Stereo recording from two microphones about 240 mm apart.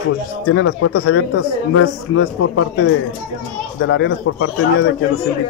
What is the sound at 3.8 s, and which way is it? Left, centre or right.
A man's voice, left.